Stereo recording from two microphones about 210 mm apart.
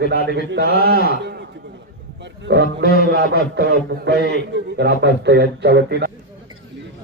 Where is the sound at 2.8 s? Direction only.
45° left (ahead or behind).